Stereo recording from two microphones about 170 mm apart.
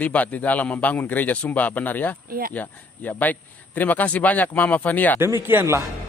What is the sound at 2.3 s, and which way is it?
Speech, 60° right (ahead or behind).